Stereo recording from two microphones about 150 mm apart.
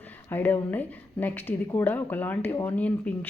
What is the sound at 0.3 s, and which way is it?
A woman's voice, 15° left (ahead or behind).